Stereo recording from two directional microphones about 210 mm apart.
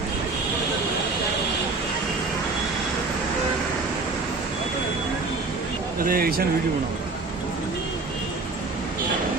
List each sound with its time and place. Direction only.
6.0 s speech: 45° right (ahead or behind)